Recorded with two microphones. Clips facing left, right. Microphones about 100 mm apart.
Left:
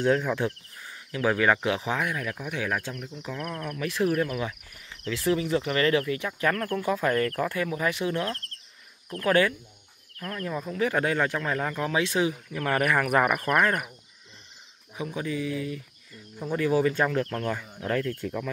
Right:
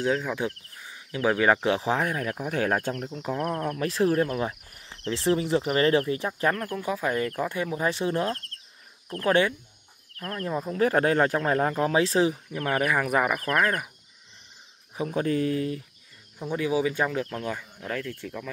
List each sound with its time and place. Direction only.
0.0 s speech: centre (ahead or behind)
0.8 s speech: 20° right (ahead or behind)
2.5 s speech: 45° right (ahead or behind)
6.5 s speech: 15° right (ahead or behind)
10.7 s speech: 35° right (ahead or behind)
12.5 s speech: 15° right (ahead or behind)
15.0 s speech: 45° right (ahead or behind)
16.5 s speech: 10° right (ahead or behind)